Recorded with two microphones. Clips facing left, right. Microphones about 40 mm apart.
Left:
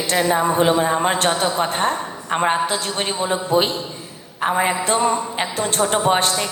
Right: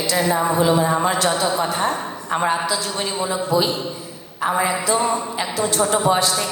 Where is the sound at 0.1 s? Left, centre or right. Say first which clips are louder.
Left 2 dB; left.